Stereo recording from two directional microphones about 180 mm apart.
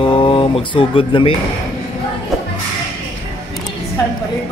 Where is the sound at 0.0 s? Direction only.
30° left (ahead or behind).